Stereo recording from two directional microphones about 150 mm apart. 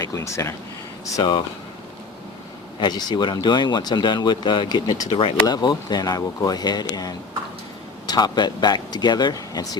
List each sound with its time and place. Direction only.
0.0 s speech: 20° left (ahead or behind)
2.8 s speech: 30° left (ahead or behind)